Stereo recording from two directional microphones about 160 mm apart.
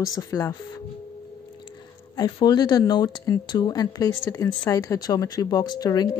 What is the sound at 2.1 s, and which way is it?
Speech, 25° left (ahead or behind).